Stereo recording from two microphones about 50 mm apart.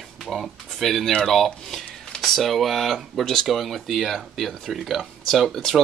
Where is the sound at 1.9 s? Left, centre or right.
Left.